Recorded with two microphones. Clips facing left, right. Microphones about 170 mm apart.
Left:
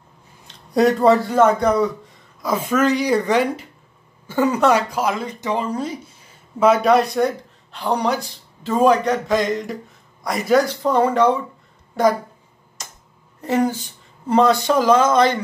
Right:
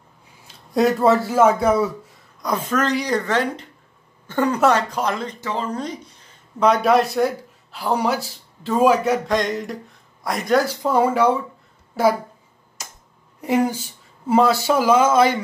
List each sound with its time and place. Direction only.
0.5 s a man's voice: centre (ahead or behind)
13.4 s speech: 10° right (ahead or behind)